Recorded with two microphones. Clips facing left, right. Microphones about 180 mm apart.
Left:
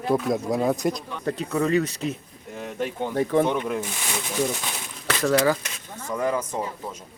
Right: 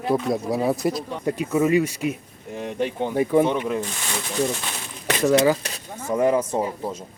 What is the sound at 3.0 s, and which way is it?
Speech, 10° right (ahead or behind).